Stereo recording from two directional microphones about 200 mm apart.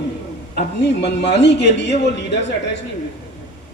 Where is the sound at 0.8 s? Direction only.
60° left (ahead or behind).